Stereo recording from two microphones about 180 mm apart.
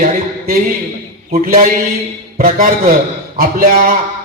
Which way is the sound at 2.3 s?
50° right (ahead or behind).